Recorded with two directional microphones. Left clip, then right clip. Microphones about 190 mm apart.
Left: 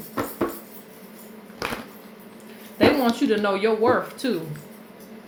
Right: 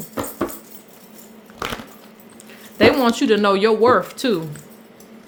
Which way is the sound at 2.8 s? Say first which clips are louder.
Right 4 dB; 50° right (ahead or behind).